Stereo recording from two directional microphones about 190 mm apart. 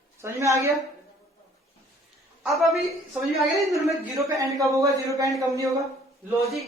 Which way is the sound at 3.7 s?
15° right (ahead or behind).